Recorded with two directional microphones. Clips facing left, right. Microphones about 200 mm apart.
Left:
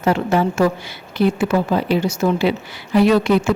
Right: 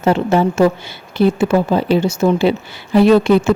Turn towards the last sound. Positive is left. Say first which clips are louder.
# right 4 dB
turn(degrees=-25)  # may be behind; listen again after turning